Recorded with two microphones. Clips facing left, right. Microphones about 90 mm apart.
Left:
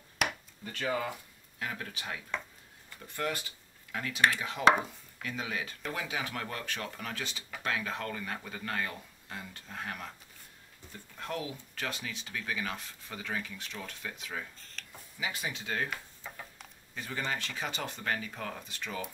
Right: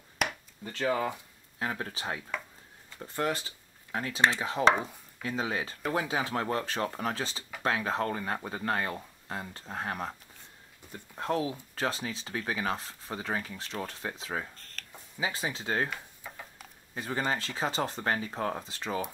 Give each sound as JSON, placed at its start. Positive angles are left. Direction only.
{"t": 0.7, "sound": "speech", "side_deg": -30}
{"t": 4.6, "sound": "chopping", "side_deg": 5}
{"t": 5.2, "sound": "speech", "side_deg": -30}
{"t": 11.1, "sound": "speech", "side_deg": -30}
{"t": 14.5, "sound": "speech", "side_deg": 0}
{"t": 15.1, "sound": "speech", "side_deg": -30}
{"t": 16.2, "sound": "tick-tock", "side_deg": -5}
{"t": 16.9, "sound": "speech", "side_deg": -35}